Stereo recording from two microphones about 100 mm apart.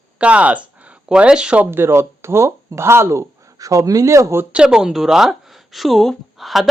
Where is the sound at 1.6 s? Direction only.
25° right (ahead or behind).